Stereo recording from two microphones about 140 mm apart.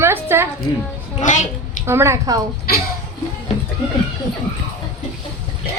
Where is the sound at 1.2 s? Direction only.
60° left (ahead or behind).